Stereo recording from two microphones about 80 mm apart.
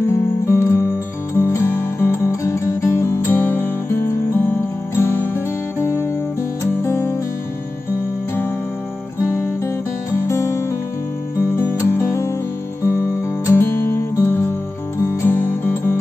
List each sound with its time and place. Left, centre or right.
0.0 s music: left
9.2 s music: left